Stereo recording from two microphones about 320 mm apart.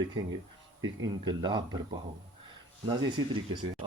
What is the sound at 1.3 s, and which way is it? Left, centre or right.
Speech, centre.